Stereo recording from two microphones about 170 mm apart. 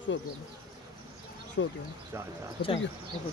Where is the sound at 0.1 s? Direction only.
90° left.